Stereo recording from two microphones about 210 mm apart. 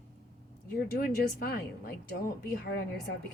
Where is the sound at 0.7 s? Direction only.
45° left (ahead or behind).